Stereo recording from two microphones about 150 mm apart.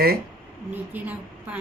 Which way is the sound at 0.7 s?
10° right (ahead or behind).